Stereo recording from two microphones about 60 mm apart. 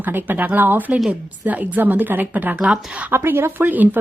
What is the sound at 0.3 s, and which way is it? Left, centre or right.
A woman's voice, right.